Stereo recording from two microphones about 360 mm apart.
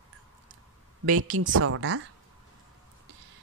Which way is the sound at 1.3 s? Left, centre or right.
Right.